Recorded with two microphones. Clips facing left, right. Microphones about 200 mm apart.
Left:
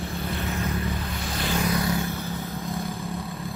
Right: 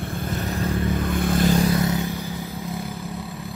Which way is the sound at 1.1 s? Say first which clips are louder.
Right 9 dB; 55° right (ahead or behind).